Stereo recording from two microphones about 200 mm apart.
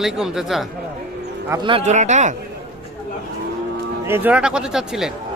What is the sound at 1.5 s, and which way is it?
Speech, 20° right (ahead or behind).